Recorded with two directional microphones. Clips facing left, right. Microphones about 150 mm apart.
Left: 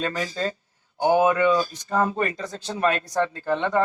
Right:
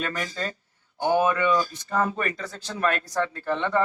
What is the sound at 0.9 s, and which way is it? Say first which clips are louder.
Speech: left 3 dB; 15° left (ahead or behind).